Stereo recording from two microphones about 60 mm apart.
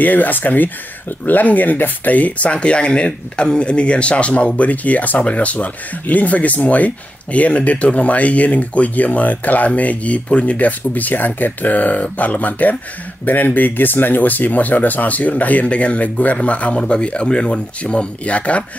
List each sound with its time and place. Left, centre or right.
0.0 s speech: left